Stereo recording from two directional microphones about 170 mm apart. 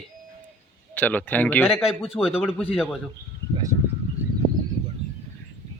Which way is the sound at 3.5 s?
20° right (ahead or behind).